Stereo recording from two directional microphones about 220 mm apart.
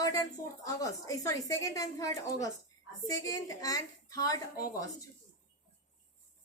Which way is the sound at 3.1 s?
15° left (ahead or behind).